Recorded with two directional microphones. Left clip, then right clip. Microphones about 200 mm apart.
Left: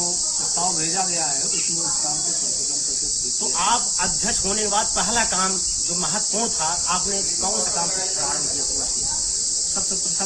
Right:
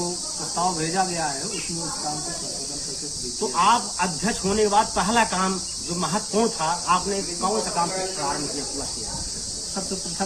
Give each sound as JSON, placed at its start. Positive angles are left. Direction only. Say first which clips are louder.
{"t": 3.6, "sound": "cricket", "louder": "right 3 dB", "side_deg": 35}